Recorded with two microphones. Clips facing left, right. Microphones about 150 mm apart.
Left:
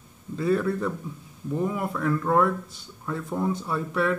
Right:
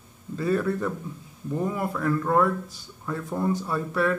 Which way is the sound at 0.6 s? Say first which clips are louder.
Even; centre (ahead or behind).